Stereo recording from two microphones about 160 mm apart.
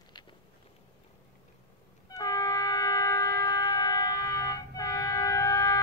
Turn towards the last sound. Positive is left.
turn(degrees=20)  # may be behind; listen again after turning